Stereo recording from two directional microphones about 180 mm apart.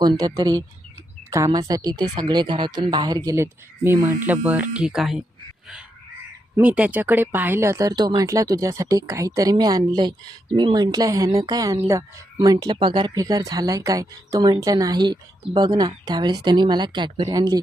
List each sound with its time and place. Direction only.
0.0 s speech: 20° right (ahead or behind); by 5.2 s centre (ahead or behind)
6.6 s speech: 5° right (ahead or behind)